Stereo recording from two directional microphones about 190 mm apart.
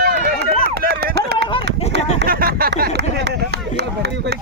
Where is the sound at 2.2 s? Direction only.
50° right (ahead or behind).